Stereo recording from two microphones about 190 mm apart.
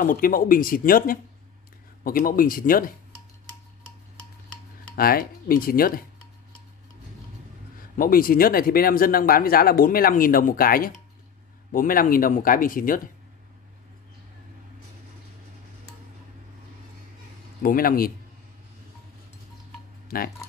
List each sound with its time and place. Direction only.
0.0 s speech: 50° left (ahead or behind)
4.9 s speech: 50° left (ahead or behind)
8.0 s speech: 50° left (ahead or behind)
17.6 s speech: 50° left (ahead or behind)